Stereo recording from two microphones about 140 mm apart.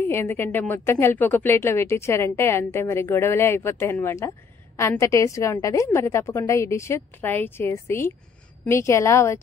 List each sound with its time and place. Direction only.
0.0 s a woman's voice: 15° left (ahead or behind)